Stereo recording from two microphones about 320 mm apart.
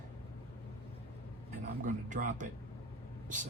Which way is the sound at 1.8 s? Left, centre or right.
Right.